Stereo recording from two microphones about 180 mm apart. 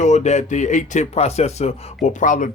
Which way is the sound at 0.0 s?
40° left (ahead or behind).